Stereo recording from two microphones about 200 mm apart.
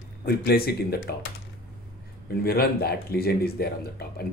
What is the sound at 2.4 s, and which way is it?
Speech, 50° left (ahead or behind).